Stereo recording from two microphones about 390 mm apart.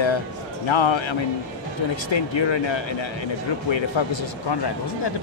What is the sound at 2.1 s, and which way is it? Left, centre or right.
Speech, left.